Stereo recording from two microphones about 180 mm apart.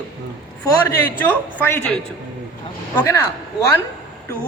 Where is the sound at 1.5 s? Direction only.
10° left (ahead or behind).